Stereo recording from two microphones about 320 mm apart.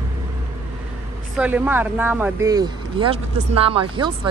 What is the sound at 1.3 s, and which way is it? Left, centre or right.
Speech, centre.